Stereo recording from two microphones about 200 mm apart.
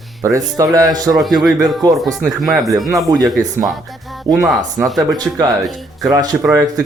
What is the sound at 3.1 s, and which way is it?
Speech, 20° right (ahead or behind).